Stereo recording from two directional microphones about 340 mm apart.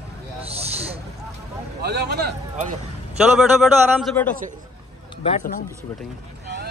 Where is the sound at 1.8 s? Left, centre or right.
Right.